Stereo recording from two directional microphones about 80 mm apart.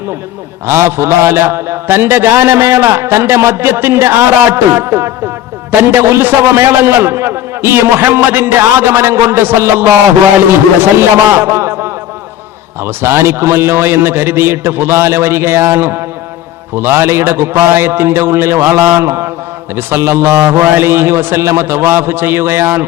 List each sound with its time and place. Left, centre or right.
0.7 s a man's voice: right
11.3 s a man's voice: right